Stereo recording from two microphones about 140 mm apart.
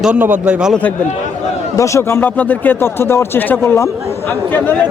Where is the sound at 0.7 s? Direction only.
10° left (ahead or behind).